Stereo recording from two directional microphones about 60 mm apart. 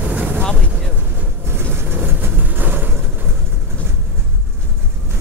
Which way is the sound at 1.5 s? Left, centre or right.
Right.